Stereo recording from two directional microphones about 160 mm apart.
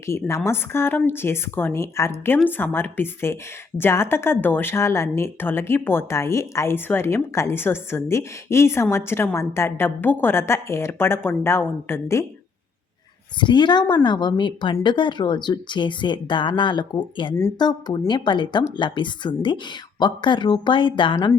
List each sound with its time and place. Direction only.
0.0 s a woman's voice: 15° left (ahead or behind)
13.4 s a woman's voice: 30° left (ahead or behind)